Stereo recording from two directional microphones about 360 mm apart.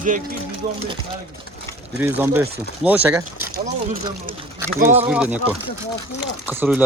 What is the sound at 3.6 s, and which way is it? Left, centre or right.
Speech, right.